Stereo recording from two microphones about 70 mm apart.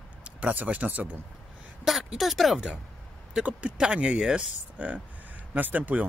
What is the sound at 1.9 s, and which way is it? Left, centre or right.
Speech, centre.